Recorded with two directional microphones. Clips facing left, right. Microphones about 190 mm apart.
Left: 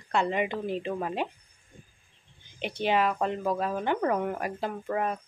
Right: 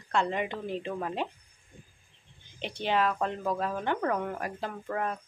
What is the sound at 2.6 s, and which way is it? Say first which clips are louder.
Speech: left 2 dB; 10° left (ahead or behind).